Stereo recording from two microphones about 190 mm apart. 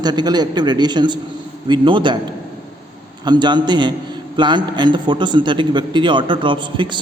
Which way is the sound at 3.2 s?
25° right (ahead or behind).